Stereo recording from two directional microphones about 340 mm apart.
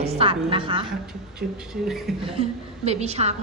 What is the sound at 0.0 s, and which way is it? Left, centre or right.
Speech, centre.